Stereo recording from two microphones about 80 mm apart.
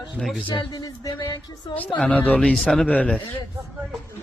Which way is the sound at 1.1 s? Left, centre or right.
Left.